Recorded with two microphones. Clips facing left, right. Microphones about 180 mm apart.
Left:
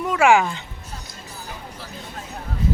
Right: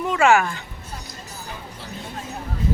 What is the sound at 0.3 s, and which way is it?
Speech, 15° left (ahead or behind).